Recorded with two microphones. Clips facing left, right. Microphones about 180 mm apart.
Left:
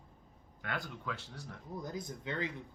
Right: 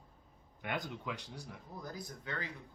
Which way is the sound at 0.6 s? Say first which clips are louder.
Right 1 dB; 20° right (ahead or behind).